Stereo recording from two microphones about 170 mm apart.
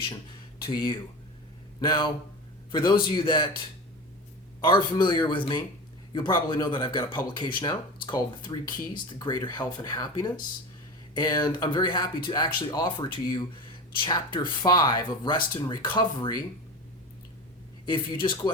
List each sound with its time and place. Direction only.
0.6 s speech: 25° left (ahead or behind)
4.6 s speech: 30° left (ahead or behind)
17.8 s speech: 30° left (ahead or behind)